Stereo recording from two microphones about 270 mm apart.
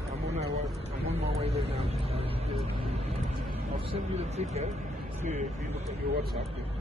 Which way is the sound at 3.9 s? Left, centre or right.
Right.